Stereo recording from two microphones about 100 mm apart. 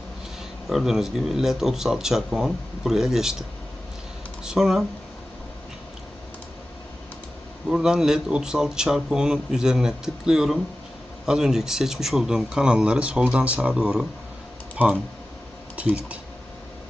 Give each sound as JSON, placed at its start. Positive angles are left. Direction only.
{"t": 0.7, "sound": "speech", "side_deg": -5}
{"t": 4.4, "sound": "speech", "side_deg": -5}
{"t": 7.7, "sound": "speech", "side_deg": -5}
{"t": 15.7, "sound": "speech", "side_deg": -10}